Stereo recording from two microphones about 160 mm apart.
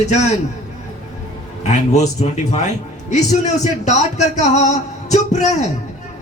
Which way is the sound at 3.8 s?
45° left (ahead or behind).